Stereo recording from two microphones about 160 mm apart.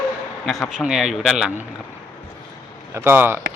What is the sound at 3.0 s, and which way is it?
Speech, 15° right (ahead or behind).